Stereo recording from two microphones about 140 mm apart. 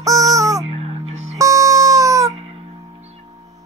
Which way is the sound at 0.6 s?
45° right (ahead or behind).